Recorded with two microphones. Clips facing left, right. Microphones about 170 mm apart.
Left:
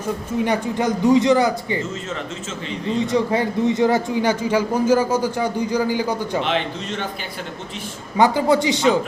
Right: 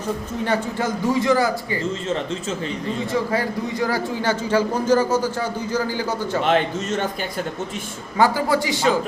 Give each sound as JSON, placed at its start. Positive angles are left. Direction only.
{"t": 0.4, "sound": "a man's voice", "side_deg": 15}
{"t": 3.1, "sound": "a man's voice", "side_deg": 20}
{"t": 6.4, "sound": "a man's voice", "side_deg": -45}
{"t": 8.1, "sound": "a man's voice", "side_deg": 20}